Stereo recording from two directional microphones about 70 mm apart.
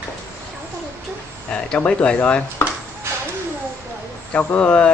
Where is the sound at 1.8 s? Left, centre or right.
Centre.